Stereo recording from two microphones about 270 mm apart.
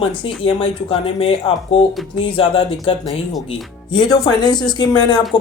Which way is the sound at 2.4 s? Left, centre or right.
Centre.